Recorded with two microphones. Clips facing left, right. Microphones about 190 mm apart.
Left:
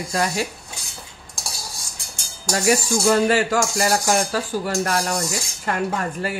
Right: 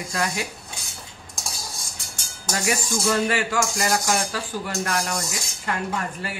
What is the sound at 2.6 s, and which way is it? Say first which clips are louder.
Speech: left 6 dB; 40° left (ahead or behind).